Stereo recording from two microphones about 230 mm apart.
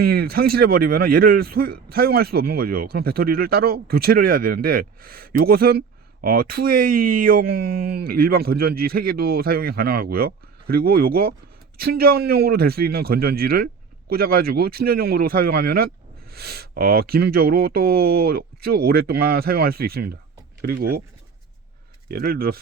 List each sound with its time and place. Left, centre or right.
0.0 s a man's voice: right
22.1 s a man's voice: right